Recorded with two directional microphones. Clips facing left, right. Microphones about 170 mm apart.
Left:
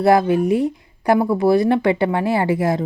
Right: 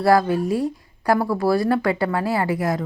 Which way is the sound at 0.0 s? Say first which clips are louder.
Left 3 dB; 20° left (ahead or behind).